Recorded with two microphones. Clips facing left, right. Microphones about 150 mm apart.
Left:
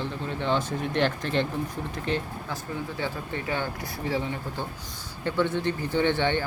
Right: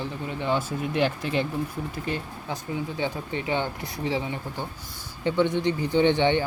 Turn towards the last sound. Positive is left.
turn(degrees=-15)  # may be behind; listen again after turning